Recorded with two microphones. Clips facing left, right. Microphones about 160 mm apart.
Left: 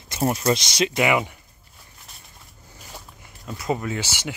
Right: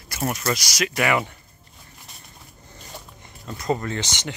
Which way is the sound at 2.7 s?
10° left (ahead or behind).